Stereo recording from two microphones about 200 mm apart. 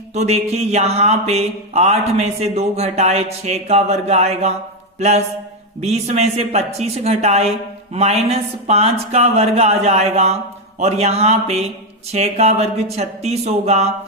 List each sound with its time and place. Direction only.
0.1 s speech: 35° right (ahead or behind)